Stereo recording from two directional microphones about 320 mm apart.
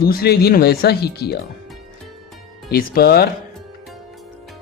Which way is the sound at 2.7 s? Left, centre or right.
Left.